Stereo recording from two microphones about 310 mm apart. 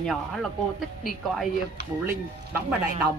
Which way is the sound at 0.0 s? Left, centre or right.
Centre.